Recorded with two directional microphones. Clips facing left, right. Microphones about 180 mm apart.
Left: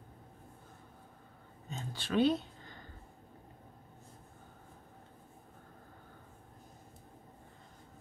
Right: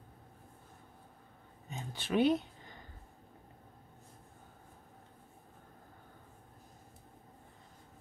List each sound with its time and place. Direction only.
1.7 s speech: 15° right (ahead or behind)